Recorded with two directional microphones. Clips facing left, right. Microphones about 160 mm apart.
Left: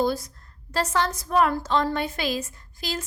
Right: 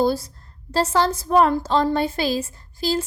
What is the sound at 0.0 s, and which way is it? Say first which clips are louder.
A woman's voice: right 4 dB; 30° right (ahead or behind).